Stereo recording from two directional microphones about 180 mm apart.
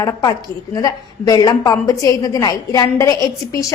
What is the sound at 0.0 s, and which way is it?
A woman's voice, 20° left (ahead or behind).